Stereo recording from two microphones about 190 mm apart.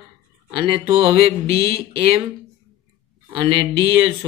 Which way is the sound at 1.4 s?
55° left (ahead or behind).